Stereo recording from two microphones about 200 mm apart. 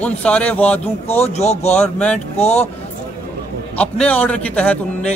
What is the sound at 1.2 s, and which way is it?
Speech, 35° left (ahead or behind).